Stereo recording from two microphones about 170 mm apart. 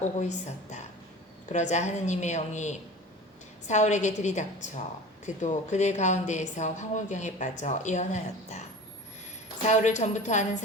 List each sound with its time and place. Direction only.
0.0 s a woman's voice: 45° left (ahead or behind)
9.6 s a woman's voice: 45° left (ahead or behind)